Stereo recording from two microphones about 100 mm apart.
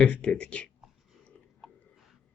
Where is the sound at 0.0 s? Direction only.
10° left (ahead or behind).